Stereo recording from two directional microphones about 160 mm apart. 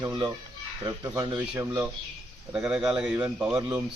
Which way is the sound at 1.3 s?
10° right (ahead or behind).